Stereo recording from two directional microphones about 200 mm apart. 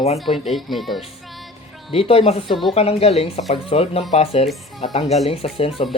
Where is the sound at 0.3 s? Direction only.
Centre (ahead or behind).